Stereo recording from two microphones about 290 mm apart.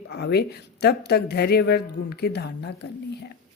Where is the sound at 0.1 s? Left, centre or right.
Left.